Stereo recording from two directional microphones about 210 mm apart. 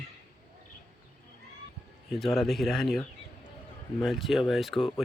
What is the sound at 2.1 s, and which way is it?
Speech, centre (ahead or behind).